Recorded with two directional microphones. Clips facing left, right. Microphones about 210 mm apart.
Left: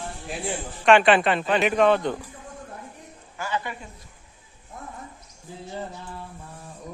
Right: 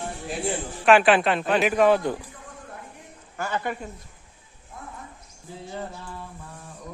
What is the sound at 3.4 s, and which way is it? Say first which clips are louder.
Speech: right 2 dB; 50° right (ahead or behind).